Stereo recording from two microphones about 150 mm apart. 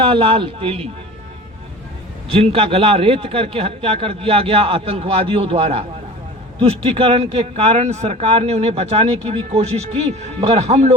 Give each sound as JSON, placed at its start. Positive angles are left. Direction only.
{"t": 0.0, "sound": "a man's voice", "side_deg": -35}
{"t": 2.3, "sound": "a man's voice", "side_deg": -40}